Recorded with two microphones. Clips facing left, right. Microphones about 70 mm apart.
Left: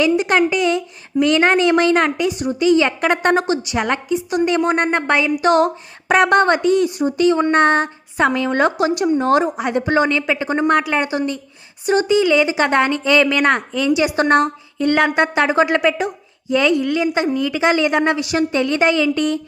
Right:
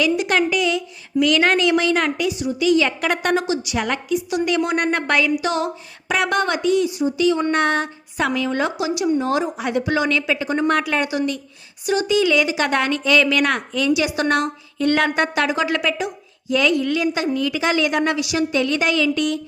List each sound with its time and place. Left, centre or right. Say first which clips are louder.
0.0 s a woman's voice: left 3 dB; left
2.3 s a woman's voice: left 1 dB; left
5.4 s a woman's voice: left 8 dB; left
9.6 s a woman's voice: left 4 dB; left
14.8 s a woman's voice: left 3 dB; centre